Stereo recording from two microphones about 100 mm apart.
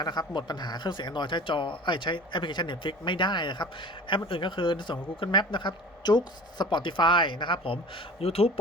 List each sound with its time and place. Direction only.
0.0 s speech: 45° left (ahead or behind)
8.2 s speech: 75° left (ahead or behind)